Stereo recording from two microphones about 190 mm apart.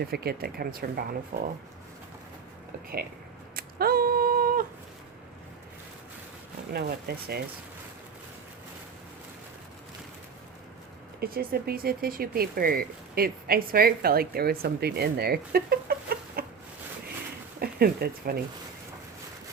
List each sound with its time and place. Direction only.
0.0 s speech: 55° right (ahead or behind)
3.5 s a sound: 50° right (ahead or behind)
6.7 s speech: 55° right (ahead or behind)
11.2 s speech: 55° right (ahead or behind)
17.6 s speech: 55° right (ahead or behind)